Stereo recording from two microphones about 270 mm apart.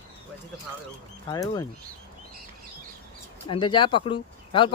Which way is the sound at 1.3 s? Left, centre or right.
Centre.